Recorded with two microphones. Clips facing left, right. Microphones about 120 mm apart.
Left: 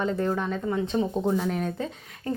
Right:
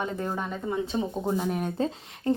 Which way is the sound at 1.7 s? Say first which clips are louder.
Right 4 dB; 35° right (ahead or behind).